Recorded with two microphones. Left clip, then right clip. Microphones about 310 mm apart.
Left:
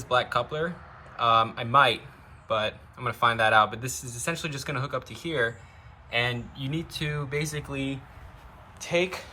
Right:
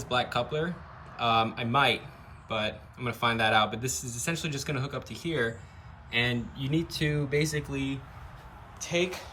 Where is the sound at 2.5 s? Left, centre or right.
Left.